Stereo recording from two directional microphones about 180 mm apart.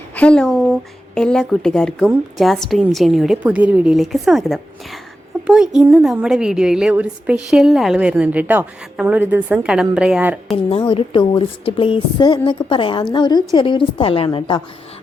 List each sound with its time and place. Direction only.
0.2 s a woman's voice: 5° left (ahead or behind)
10.7 s a woman's voice: 30° left (ahead or behind)